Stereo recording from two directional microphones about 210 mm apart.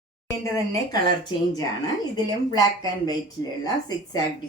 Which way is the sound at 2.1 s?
20° left (ahead or behind).